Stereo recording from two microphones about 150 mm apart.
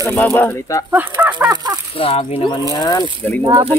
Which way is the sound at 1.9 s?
40° left (ahead or behind).